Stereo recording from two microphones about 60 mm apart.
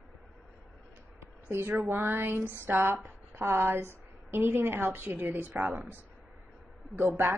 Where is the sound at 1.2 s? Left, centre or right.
Right.